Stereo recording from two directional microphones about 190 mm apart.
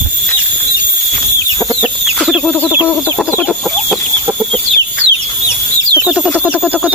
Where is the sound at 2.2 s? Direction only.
Centre (ahead or behind).